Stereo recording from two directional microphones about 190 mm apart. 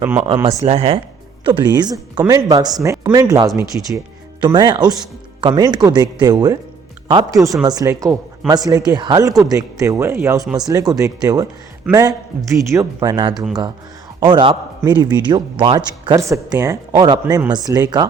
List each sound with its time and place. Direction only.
0.0 s speech: 10° right (ahead or behind)
0.6 s speech: 30° right (ahead or behind)
13.3 s speech: centre (ahead or behind)
14.2 s speech: 25° right (ahead or behind)